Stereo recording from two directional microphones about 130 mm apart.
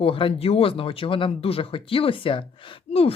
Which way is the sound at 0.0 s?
45° left (ahead or behind).